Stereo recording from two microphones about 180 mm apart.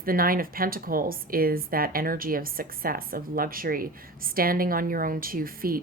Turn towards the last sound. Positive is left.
turn(degrees=-55)  # may be behind; listen again after turning